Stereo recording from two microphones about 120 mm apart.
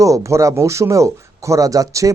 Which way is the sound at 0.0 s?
25° right (ahead or behind).